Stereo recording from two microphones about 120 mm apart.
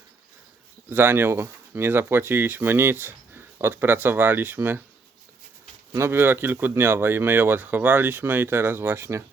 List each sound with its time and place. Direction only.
0.9 s speech: 15° right (ahead or behind)
5.9 s speech: 20° right (ahead or behind)